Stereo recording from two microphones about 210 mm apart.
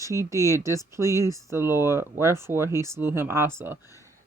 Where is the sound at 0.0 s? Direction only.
15° right (ahead or behind).